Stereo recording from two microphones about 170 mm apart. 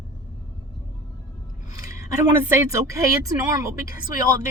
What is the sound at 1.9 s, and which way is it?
Speech, 20° right (ahead or behind).